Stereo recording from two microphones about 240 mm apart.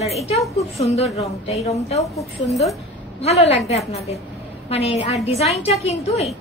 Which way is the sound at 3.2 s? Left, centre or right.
Left.